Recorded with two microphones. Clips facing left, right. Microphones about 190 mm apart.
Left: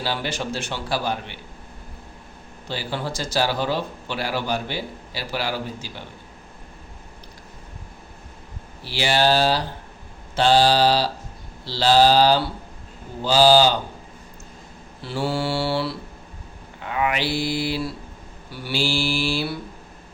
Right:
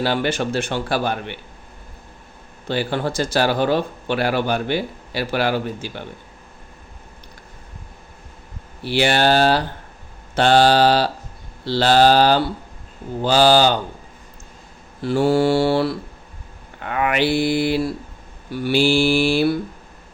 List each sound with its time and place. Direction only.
0.0 s speech: 55° right (ahead or behind)
2.6 s speech: 55° right (ahead or behind)
8.8 s speech: 55° right (ahead or behind)
15.0 s mantra: 50° right (ahead or behind)
16.8 s speech: 60° right (ahead or behind)